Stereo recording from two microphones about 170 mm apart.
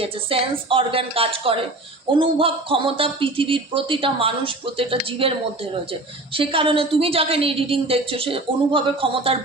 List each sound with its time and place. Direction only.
0.0 s speech: 35° right (ahead or behind)